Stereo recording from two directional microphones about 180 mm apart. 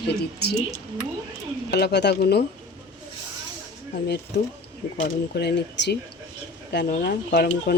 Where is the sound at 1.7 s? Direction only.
65° left (ahead or behind).